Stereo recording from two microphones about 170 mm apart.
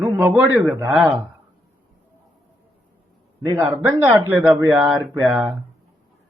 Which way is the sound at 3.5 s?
15° right (ahead or behind).